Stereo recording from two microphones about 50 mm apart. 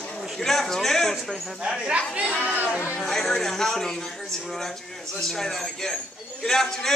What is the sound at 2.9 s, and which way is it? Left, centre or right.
A man's voice, centre.